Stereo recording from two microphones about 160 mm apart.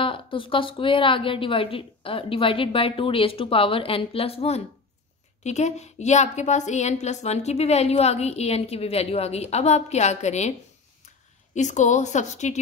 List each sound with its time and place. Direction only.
0.0 s a woman's voice: 35° left (ahead or behind)
11.5 s a woman's voice: 50° left (ahead or behind)